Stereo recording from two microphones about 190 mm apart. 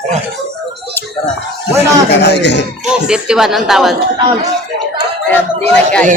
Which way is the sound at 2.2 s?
65° left (ahead or behind).